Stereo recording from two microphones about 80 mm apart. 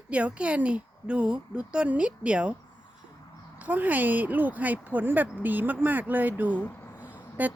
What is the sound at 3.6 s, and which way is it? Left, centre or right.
A woman's voice, right.